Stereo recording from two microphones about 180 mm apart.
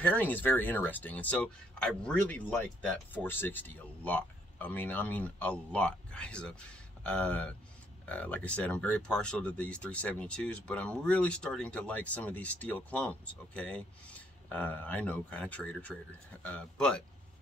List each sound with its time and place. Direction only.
0.0 s speech: 10° left (ahead or behind)